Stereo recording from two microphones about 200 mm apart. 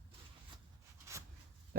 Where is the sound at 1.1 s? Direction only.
15° right (ahead or behind).